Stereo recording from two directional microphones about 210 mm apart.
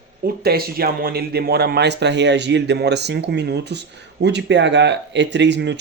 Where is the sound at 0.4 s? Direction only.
45° right (ahead or behind).